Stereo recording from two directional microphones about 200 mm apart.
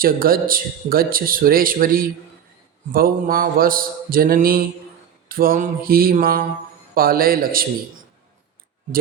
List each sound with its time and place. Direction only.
0.0 s speech: 45° right (ahead or behind)